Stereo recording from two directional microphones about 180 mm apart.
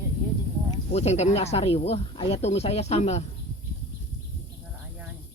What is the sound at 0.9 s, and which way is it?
Speech, 35° left (ahead or behind).